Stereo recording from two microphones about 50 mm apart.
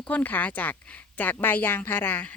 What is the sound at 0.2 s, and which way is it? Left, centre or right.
A woman's voice, left.